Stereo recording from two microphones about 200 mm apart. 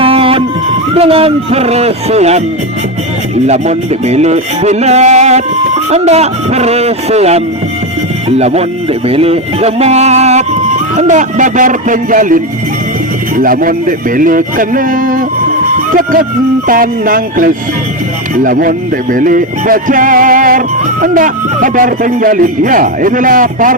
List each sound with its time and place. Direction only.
0.0 s music: 30° right (ahead or behind)
0.9 s speech: 30° right (ahead or behind)
3.4 s speech: 35° right (ahead or behind)
13.3 s music: 45° right (ahead or behind)
15.9 s speech: 45° right (ahead or behind)
16.6 s music: 45° right (ahead or behind)